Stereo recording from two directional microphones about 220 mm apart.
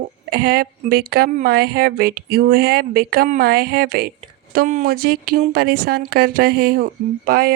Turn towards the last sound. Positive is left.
turn(degrees=-40)  # may be behind; listen again after turning